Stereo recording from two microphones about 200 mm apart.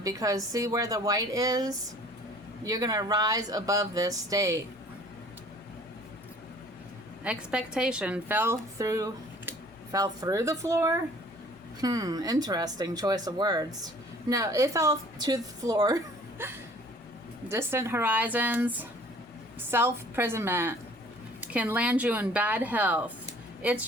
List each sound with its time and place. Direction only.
0.0 s speech: 15° right (ahead or behind)
7.3 s a woman's voice: 5° right (ahead or behind)
17.5 s speech: 15° right (ahead or behind)